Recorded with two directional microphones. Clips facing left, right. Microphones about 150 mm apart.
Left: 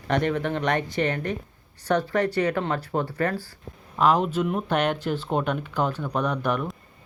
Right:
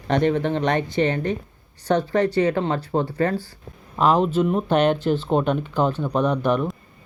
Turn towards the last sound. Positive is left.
turn(degrees=-25)  # may be behind; listen again after turning